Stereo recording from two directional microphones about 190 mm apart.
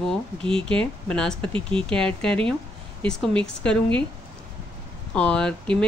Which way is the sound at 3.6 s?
5° left (ahead or behind).